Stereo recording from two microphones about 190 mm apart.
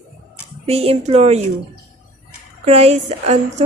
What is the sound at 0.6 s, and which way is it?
Speech, 35° right (ahead or behind).